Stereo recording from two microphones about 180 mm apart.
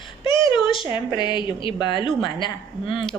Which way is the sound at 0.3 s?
25° left (ahead or behind).